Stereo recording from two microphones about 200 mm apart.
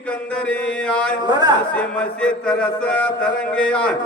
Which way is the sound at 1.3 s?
20° right (ahead or behind).